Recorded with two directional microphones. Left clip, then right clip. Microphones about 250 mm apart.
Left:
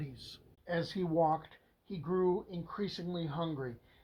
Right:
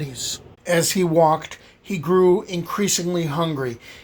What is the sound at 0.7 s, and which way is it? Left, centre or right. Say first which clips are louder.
Speech: right 16 dB; right.